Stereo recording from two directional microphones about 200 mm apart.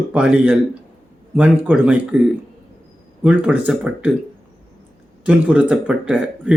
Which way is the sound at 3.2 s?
5° right (ahead or behind).